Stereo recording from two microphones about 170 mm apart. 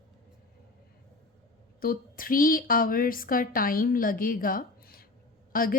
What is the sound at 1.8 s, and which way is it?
A woman's voice, 55° left (ahead or behind).